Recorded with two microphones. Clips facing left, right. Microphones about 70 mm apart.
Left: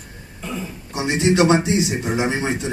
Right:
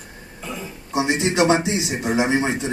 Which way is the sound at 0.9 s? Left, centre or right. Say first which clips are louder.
Left 1 dB; right.